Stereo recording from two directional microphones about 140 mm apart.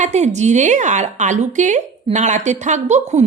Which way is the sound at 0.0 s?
55° right (ahead or behind).